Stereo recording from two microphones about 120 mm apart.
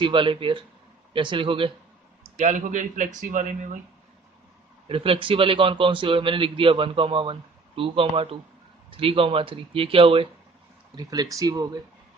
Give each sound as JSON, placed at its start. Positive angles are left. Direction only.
{"t": 0.0, "sound": "a man's voice", "side_deg": -45}
{"t": 2.3, "sound": "speech", "side_deg": -90}
{"t": 4.8, "sound": "a man's voice", "side_deg": -50}
{"t": 11.0, "sound": "speech", "side_deg": -30}